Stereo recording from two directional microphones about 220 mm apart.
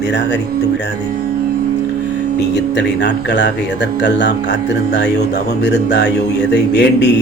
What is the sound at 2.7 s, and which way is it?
Speech, 50° left (ahead or behind).